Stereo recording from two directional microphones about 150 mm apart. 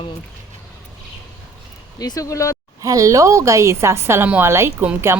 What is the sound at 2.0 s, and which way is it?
Speech, 25° left (ahead or behind).